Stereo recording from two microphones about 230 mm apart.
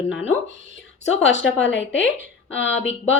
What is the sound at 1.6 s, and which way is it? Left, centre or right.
A woman's voice, left.